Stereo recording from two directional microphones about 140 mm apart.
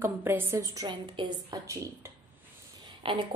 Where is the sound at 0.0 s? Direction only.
15° right (ahead or behind).